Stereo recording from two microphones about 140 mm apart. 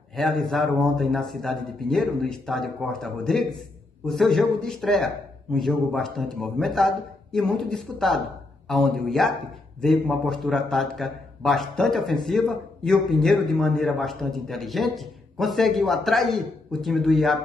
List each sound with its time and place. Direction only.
0.1 s a man's voice: centre (ahead or behind)